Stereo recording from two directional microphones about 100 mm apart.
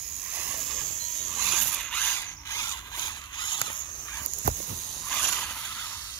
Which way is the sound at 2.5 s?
35° left (ahead or behind).